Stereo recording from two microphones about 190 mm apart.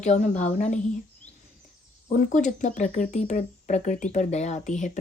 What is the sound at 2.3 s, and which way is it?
A woman's voice, 40° left (ahead or behind).